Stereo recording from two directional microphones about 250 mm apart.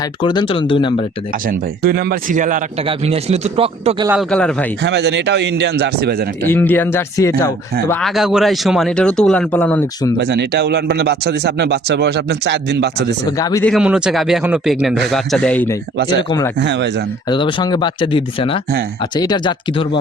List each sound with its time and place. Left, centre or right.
0.2 s speech: centre
1.5 s a man's voice: right
4.1 s speech: centre
4.8 s speech: right
6.5 s speech: centre
10.2 s a man's voice: right
13.3 s speech: centre
13.7 s speech: centre
16.6 s speech: right
17.2 s speech: centre